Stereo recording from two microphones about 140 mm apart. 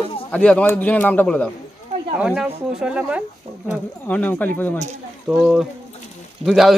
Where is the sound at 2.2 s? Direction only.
5° right (ahead or behind).